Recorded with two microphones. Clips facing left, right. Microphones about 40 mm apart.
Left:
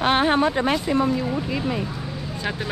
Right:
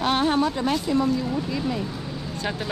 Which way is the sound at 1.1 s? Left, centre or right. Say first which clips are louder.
Left 1 dB; centre.